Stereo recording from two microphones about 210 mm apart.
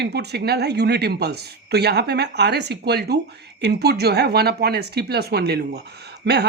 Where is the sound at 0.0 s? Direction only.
50° right (ahead or behind).